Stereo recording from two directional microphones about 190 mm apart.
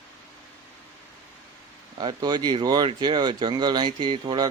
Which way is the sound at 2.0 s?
25° right (ahead or behind).